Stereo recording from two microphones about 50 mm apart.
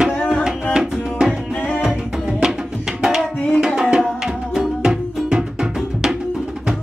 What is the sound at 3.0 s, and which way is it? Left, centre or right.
Tabla, centre.